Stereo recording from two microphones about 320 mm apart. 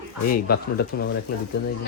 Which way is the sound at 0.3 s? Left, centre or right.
Left.